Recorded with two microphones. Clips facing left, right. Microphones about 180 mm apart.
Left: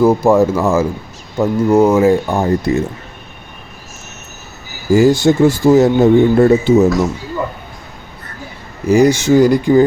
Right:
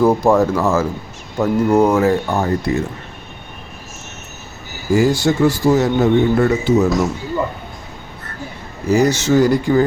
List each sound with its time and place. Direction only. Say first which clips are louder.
0.0 s speech: left 3 dB; 5° left (ahead or behind)
4.9 s speech: left 5 dB; 25° left (ahead or behind)
8.9 s speech: left 4 dB; 15° left (ahead or behind)